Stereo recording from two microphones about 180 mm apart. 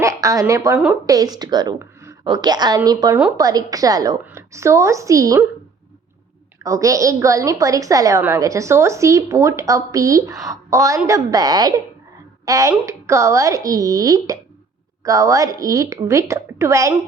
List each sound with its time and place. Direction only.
0.0 s a woman's voice: 15° right (ahead or behind)
6.6 s a woman's voice: 20° right (ahead or behind)